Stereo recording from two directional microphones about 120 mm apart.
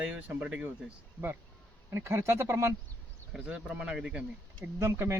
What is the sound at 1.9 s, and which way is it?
Speech, 25° right (ahead or behind).